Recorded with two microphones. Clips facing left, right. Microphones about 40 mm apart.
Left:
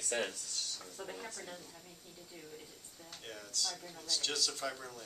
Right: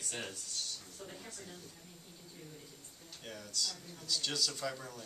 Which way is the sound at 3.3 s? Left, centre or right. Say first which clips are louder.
Even; centre.